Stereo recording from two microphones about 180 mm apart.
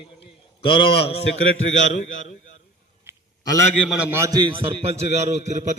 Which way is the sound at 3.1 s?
15° right (ahead or behind).